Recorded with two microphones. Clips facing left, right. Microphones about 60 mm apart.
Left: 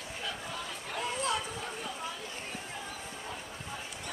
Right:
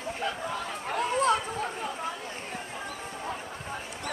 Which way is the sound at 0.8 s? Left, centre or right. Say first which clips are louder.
Right 9 dB; right.